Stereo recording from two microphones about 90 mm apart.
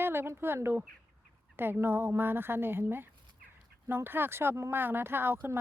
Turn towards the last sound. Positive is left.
turn(degrees=-25)  # may be behind; listen again after turning